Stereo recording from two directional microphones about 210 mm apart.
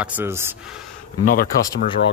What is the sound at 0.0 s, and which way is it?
Speech, 10° right (ahead or behind).